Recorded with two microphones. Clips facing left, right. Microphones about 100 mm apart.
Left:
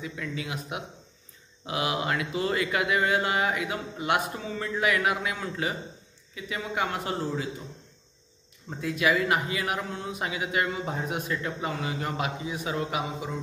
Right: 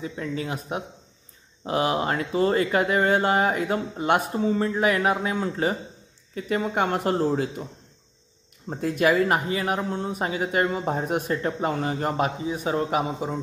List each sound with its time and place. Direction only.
0.0 s speech: 35° right (ahead or behind)
6.3 s a man's voice: 50° right (ahead or behind)
8.6 s speech: 45° right (ahead or behind)